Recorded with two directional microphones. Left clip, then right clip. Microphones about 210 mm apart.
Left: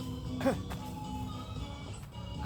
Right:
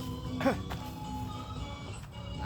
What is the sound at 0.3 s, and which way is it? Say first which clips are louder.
Music: right 2 dB; 25° right (ahead or behind).